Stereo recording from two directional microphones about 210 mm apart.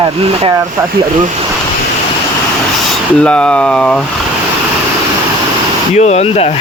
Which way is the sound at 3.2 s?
5° left (ahead or behind).